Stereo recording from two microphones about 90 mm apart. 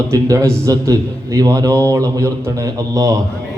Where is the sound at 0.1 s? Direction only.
35° right (ahead or behind).